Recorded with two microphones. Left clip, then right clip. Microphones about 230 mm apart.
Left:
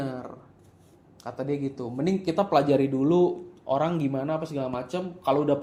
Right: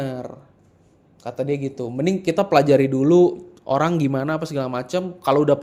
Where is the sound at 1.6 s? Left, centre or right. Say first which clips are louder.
Right 6 dB; right.